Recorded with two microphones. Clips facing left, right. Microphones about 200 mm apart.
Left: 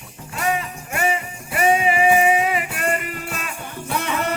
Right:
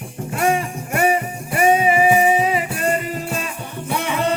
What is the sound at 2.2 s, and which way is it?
Music, 30° right (ahead or behind).